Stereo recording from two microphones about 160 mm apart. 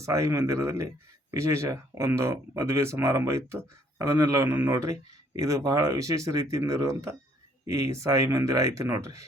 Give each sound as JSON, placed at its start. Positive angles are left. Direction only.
{"t": 0.0, "sound": "speech", "side_deg": -20}